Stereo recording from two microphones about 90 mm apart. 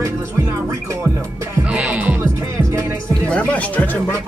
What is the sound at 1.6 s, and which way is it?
Music, 15° right (ahead or behind).